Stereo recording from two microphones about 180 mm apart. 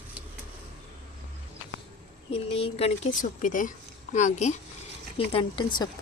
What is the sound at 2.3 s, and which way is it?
Speech, 35° left (ahead or behind).